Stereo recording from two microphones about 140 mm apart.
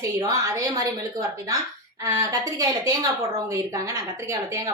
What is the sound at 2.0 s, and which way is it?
A woman's voice, 20° right (ahead or behind).